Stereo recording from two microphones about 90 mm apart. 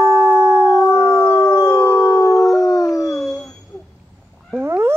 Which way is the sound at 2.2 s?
40° left (ahead or behind).